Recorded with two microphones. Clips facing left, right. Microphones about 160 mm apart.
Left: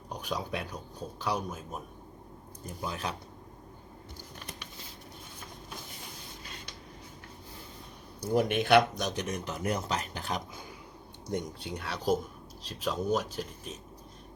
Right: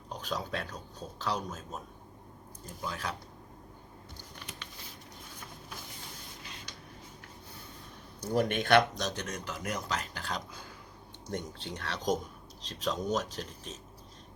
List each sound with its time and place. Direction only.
0.1 s speech: 10° left (ahead or behind)
8.2 s speech: 5° left (ahead or behind)